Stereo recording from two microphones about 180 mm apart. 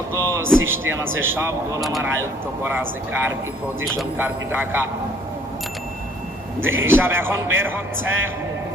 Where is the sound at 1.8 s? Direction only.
Centre (ahead or behind).